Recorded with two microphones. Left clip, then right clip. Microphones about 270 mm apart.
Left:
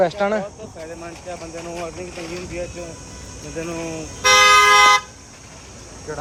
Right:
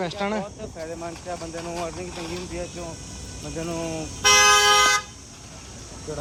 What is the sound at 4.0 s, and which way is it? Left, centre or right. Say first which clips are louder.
Vehicle: left 4 dB; centre.